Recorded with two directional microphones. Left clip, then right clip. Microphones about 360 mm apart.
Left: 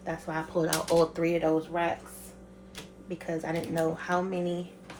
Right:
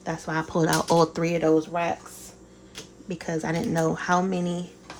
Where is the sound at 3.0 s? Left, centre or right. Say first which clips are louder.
Right 4 dB; right.